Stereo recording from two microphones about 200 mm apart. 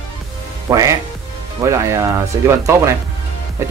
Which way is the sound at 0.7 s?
15° right (ahead or behind).